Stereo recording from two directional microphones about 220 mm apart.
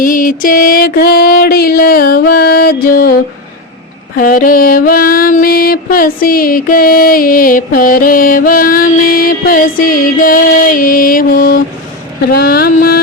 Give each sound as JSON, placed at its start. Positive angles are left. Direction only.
{"t": 0.0, "sound": "music", "side_deg": 40}
{"t": 4.2, "sound": "mantra", "side_deg": 40}
{"t": 12.3, "sound": "music", "side_deg": 45}